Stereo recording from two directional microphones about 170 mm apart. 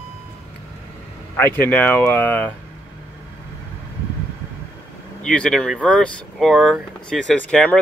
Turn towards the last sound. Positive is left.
turn(degrees=5)  # may be behind; listen again after turning